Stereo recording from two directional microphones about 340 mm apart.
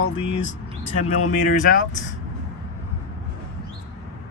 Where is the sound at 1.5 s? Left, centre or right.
Left.